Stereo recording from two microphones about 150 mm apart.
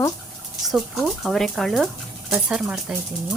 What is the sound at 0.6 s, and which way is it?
Speech, centre (ahead or behind).